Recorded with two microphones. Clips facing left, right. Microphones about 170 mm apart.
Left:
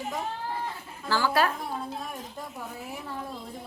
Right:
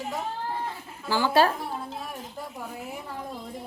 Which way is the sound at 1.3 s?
30° right (ahead or behind).